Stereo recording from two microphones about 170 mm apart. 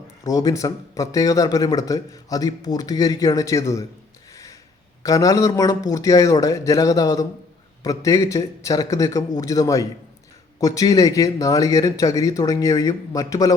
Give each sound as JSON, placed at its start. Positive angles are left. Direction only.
{"t": 0.3, "sound": "speech", "side_deg": 20}
{"t": 5.0, "sound": "speech", "side_deg": 20}